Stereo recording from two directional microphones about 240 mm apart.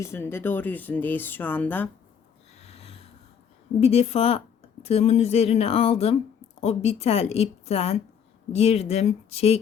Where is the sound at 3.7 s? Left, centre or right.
Left.